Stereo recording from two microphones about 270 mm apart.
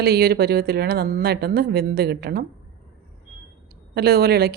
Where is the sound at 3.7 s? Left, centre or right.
Right.